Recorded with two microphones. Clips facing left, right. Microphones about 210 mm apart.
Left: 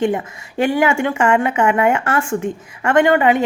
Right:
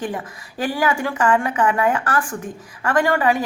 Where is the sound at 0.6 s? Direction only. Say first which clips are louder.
Left 5 dB; 25° left (ahead or behind).